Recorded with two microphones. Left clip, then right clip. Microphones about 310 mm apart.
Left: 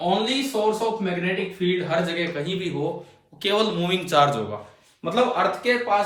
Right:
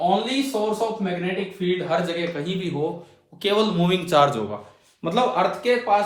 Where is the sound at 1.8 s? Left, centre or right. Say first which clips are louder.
Right 1 dB; centre.